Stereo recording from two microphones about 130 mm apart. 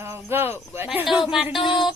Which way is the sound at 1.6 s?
40° left (ahead or behind).